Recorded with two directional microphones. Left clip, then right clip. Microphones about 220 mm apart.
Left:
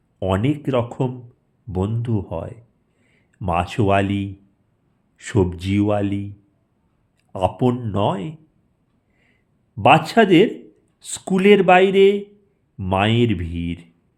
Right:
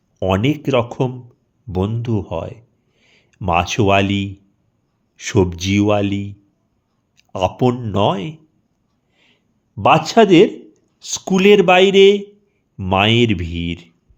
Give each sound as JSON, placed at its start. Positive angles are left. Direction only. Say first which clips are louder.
{"t": 0.2, "sound": "speech", "louder": "right 4 dB", "side_deg": -15}
{"t": 9.1, "sound": "a sound", "louder": "right 6 dB", "side_deg": -20}
{"t": 11.0, "sound": "speech", "louder": "right 3 dB", "side_deg": -10}